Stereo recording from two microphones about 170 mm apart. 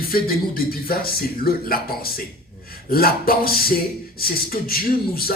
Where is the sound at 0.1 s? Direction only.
60° left (ahead or behind).